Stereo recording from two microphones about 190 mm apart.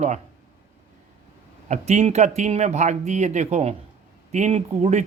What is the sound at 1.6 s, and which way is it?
Speech, 35° right (ahead or behind).